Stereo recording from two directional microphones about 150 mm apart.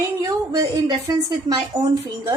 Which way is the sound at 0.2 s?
25° right (ahead or behind).